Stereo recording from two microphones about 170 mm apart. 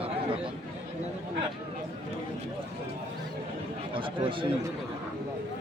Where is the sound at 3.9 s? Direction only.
30° right (ahead or behind).